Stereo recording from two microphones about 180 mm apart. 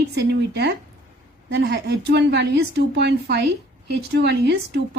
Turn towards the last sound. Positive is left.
turn(degrees=-70)  # may be behind; listen again after turning